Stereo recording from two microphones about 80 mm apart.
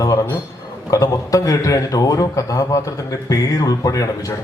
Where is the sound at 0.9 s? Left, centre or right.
Left.